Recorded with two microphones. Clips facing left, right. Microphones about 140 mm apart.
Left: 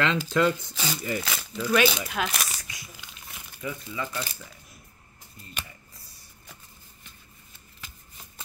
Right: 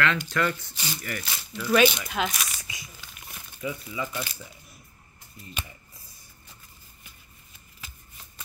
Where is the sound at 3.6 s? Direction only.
15° right (ahead or behind).